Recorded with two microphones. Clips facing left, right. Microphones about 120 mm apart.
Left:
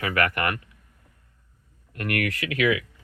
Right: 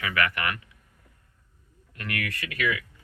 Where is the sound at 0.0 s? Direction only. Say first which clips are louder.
Left 3 dB; 45° left (ahead or behind).